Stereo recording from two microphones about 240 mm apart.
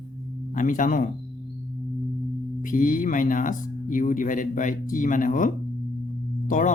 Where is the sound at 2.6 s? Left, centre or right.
Left.